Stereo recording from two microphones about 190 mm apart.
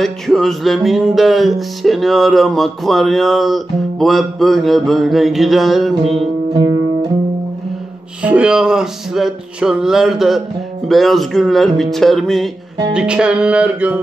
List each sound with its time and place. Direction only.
0.0 s music: centre (ahead or behind)
6.5 s music: 20° right (ahead or behind)
8.2 s music: 5° right (ahead or behind)